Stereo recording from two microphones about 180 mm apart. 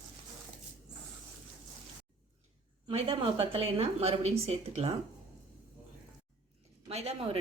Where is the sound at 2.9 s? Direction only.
30° right (ahead or behind).